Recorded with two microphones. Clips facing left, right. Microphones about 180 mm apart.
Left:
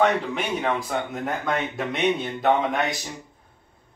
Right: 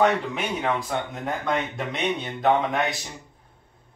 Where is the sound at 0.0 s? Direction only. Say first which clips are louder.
Even; centre (ahead or behind).